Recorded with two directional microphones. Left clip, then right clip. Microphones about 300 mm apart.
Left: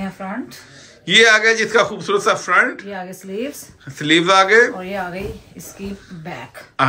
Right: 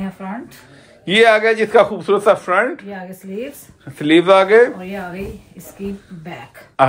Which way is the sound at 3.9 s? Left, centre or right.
Centre.